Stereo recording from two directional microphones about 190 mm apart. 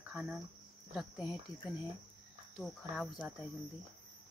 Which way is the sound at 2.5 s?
Centre (ahead or behind).